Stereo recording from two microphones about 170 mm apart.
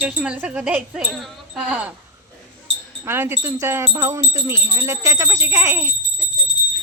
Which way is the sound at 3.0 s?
15° right (ahead or behind).